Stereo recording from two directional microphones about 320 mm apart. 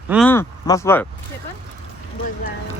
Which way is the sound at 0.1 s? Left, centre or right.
Centre.